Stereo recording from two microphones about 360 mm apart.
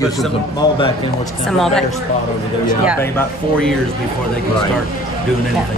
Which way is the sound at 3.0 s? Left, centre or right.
Centre.